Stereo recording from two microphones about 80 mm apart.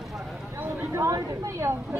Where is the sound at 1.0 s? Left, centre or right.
Right.